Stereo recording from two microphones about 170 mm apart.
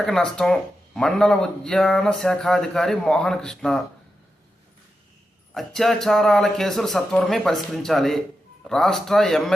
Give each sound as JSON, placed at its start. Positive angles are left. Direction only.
{"t": 0.0, "sound": "speech", "side_deg": 5}
{"t": 5.5, "sound": "speech", "side_deg": 0}